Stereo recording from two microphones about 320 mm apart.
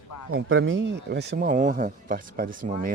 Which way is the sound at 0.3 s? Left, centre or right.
Right.